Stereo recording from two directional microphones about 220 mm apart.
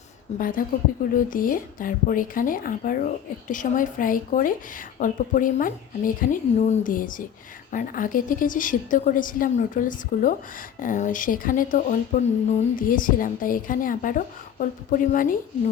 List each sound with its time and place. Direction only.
0.3 s speech: 40° left (ahead or behind)